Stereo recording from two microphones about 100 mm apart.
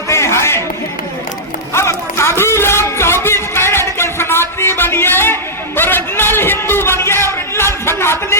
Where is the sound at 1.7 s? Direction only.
25° left (ahead or behind).